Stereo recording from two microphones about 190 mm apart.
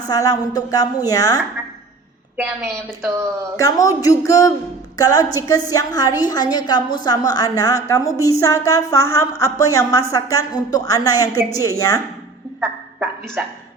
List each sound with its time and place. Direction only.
0.1 s a woman's voice: 20° left (ahead or behind)
2.3 s a woman's voice: 5° right (ahead or behind)
3.6 s a woman's voice: 20° left (ahead or behind)
12.5 s a sound: 5° right (ahead or behind)